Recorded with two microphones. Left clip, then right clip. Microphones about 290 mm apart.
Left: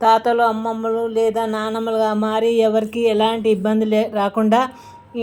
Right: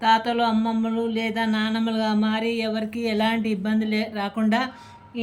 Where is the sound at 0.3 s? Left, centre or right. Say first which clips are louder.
Left 6 dB; left.